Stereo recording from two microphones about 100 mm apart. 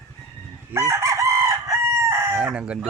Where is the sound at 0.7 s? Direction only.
30° right (ahead or behind).